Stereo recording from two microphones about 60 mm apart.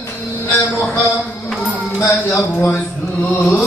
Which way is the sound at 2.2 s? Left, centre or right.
Left.